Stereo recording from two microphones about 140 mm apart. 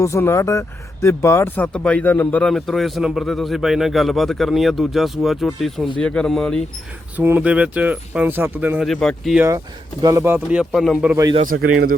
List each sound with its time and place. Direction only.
0.0 s speech: 20° left (ahead or behind)
7.2 s speech: 15° right (ahead or behind)
8.9 s speech: 5° left (ahead or behind)
10.0 s speech: 25° right (ahead or behind)
10.5 s speech: 5° right (ahead or behind)
11.4 s speech: 90° right